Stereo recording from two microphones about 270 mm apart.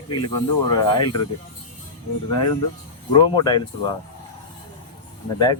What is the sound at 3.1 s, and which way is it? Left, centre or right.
Speech, centre.